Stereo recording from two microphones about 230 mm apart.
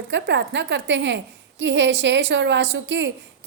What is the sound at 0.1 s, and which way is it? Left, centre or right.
A woman's voice, right.